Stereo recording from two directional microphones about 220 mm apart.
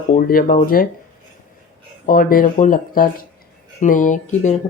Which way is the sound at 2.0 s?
40° left (ahead or behind).